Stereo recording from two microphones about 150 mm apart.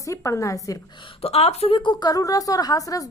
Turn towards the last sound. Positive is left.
turn(degrees=25)  # may be behind; listen again after turning